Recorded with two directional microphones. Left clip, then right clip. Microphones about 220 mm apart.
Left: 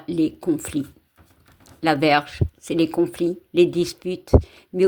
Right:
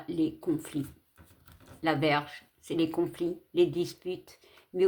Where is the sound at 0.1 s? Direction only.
30° left (ahead or behind).